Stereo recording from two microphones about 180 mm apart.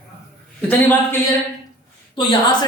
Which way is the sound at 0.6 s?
10° left (ahead or behind).